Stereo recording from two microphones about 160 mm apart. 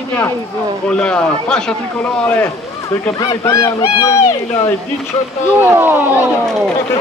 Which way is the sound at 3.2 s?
20° left (ahead or behind).